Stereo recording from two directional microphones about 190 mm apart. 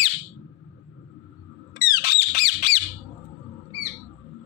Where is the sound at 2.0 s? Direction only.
45° left (ahead or behind).